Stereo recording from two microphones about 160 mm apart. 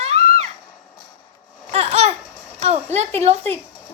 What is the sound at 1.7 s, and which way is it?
Babbling, 40° right (ahead or behind).